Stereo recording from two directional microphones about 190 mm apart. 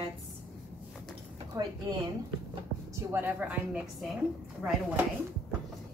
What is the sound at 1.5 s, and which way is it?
Speech, 15° right (ahead or behind).